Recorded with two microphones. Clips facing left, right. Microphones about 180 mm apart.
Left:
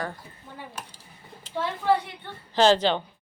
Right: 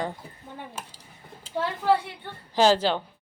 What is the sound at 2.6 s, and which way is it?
Speech, 10° right (ahead or behind).